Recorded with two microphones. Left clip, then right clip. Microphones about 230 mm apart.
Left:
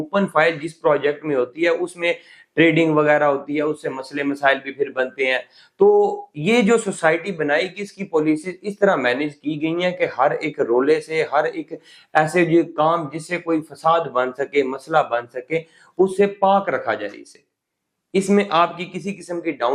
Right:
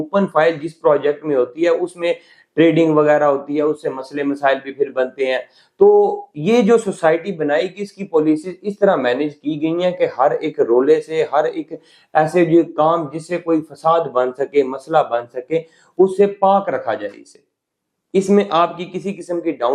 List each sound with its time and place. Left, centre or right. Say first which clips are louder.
0.0 s a man's voice: right 2 dB; left